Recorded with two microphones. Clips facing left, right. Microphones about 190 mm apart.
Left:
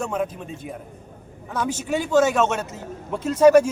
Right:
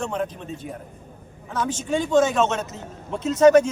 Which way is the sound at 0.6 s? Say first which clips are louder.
Left 1 dB; 35° right (ahead or behind).